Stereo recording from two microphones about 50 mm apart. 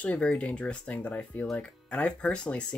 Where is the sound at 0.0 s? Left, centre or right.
Left.